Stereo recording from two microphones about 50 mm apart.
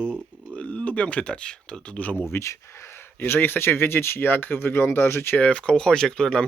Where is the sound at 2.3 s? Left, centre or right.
Left.